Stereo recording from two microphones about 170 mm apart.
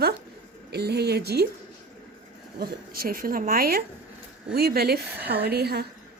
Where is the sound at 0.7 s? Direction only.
70° right (ahead or behind).